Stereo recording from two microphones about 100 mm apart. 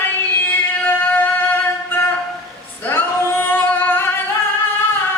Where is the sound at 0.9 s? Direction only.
20° left (ahead or behind).